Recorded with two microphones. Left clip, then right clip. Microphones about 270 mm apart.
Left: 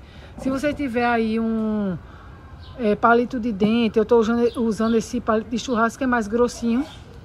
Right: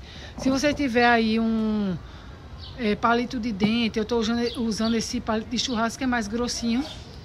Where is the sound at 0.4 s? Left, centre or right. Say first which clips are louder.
Even; centre.